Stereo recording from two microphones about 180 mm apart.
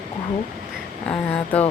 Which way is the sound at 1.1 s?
5° left (ahead or behind).